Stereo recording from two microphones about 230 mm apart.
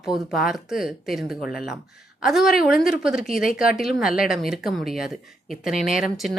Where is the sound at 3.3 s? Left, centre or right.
Left.